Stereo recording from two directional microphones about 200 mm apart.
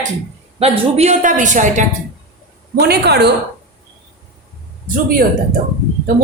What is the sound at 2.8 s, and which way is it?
Speech, 55° right (ahead or behind).